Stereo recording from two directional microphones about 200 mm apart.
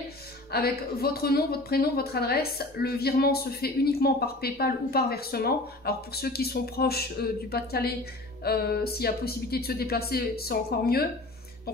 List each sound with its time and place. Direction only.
0.5 s a woman's voice: 50° left (ahead or behind)